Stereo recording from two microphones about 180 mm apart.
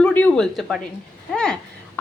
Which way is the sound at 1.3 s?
5° left (ahead or behind).